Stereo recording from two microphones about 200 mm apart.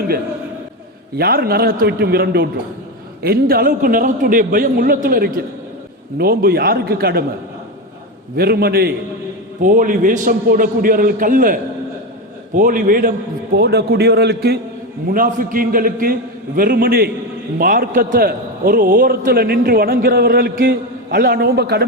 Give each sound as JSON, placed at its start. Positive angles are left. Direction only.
{"t": 1.2, "sound": "a man's voice", "side_deg": -50}
{"t": 8.4, "sound": "a man's voice", "side_deg": -50}